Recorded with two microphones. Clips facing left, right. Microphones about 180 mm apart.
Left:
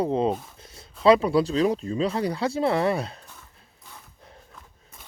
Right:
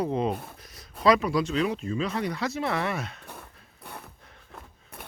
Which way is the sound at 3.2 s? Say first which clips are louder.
Right 6 dB; 60° right (ahead or behind).